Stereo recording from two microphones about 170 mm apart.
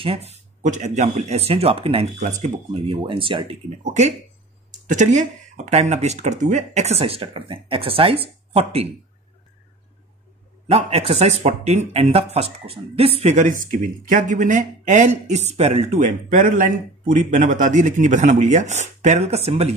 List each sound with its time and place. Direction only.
0.0 s speech: 35° right (ahead or behind)
2.2 s speech: 45° right (ahead or behind)
2.9 s speech: 30° right (ahead or behind)
3.8 s speech: 45° right (ahead or behind)
10.7 s speech: 35° right (ahead or behind)